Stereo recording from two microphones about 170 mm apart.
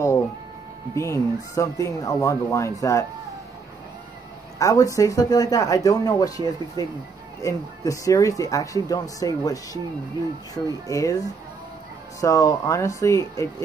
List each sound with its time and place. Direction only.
0.9 s speech: 15° left (ahead or behind)
4.6 s speech: 20° left (ahead or behind)